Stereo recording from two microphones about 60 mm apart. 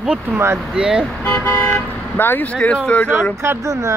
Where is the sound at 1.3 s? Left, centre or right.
Left.